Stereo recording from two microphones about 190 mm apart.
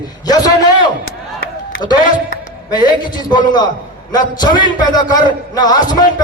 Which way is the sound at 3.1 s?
20° left (ahead or behind).